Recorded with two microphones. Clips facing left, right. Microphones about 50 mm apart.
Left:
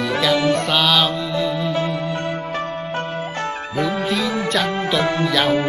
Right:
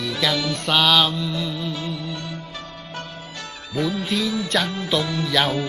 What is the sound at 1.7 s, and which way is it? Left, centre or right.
Music, left.